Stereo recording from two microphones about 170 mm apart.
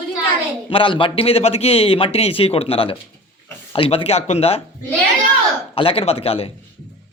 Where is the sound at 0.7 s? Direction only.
30° left (ahead or behind).